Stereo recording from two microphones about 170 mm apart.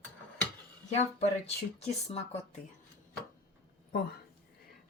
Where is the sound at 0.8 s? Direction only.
40° left (ahead or behind).